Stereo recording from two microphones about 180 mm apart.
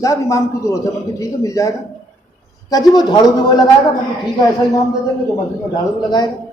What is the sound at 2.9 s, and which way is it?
Speech, 25° left (ahead or behind).